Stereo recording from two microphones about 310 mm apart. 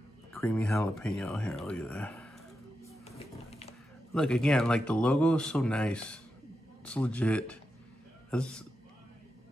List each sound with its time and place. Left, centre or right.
0.3 s speech: centre
3.2 s a sound: centre
4.1 s speech: centre